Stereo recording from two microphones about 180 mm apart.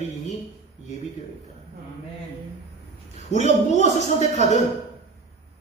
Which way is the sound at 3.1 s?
40° left (ahead or behind).